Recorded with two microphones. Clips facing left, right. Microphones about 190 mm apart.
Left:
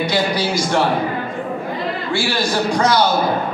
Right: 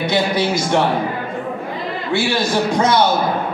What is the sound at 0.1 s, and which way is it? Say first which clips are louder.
Speech: right 1 dB; 20° right (ahead or behind).